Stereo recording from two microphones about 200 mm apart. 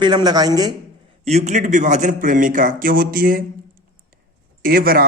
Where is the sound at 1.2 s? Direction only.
35° right (ahead or behind).